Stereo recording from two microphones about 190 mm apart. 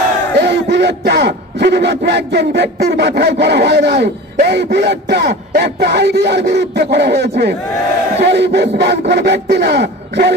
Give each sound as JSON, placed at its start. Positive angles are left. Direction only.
{"t": 0.4, "sound": "speech", "side_deg": -65}